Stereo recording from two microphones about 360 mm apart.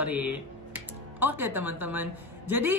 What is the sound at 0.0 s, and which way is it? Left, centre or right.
Speech, centre.